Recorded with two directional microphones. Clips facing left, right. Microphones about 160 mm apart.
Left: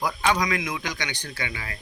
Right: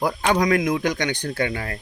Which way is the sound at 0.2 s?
50° right (ahead or behind).